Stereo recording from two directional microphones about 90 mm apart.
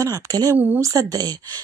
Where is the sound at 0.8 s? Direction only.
40° right (ahead or behind).